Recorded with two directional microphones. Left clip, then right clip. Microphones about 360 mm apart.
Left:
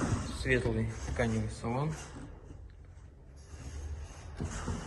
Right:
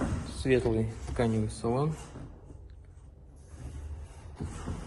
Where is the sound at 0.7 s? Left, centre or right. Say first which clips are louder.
Right 4 dB; centre.